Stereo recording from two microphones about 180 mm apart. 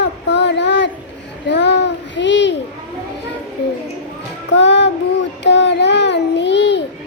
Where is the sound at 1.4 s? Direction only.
75° left (ahead or behind).